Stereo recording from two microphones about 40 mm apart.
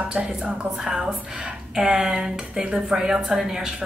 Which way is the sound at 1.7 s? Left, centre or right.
Centre.